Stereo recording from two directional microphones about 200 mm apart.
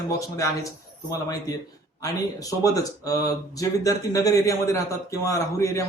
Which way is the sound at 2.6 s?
15° left (ahead or behind).